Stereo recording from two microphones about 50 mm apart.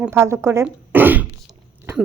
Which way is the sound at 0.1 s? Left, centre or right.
Right.